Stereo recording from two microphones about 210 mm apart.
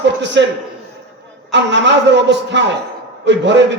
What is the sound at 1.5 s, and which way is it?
A man's voice, 55° right (ahead or behind).